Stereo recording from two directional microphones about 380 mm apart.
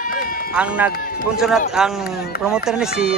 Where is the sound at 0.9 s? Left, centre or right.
Left.